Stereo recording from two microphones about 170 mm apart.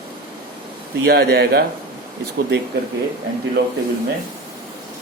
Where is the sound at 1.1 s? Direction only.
70° right (ahead or behind).